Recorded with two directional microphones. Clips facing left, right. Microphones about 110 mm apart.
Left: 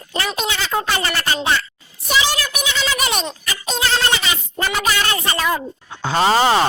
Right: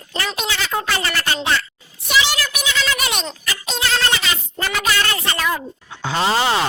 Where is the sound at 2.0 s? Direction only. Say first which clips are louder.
Even; 40° left (ahead or behind).